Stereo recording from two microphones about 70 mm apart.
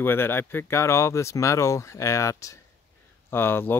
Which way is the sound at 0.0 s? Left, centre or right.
Left.